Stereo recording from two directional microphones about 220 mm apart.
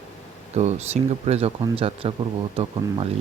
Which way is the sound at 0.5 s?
30° right (ahead or behind).